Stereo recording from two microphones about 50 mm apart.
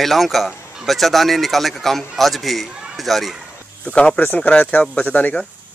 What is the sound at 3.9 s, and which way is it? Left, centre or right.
Speech, left.